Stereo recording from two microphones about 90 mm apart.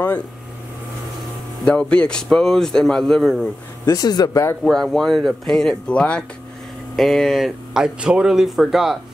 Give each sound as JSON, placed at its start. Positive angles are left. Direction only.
{"t": 1.6, "sound": "a man's voice", "side_deg": 10}
{"t": 3.8, "sound": "speech", "side_deg": 45}
{"t": 4.6, "sound": "speech", "side_deg": 5}
{"t": 7.0, "sound": "speech", "side_deg": 0}